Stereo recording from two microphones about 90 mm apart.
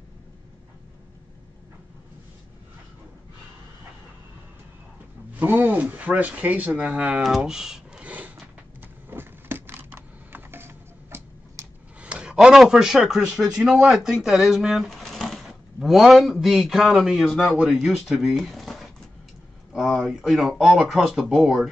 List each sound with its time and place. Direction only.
5.3 s speech: 20° right (ahead or behind)
9.1 s a sound: 25° right (ahead or behind)
12.0 s speech: 10° right (ahead or behind)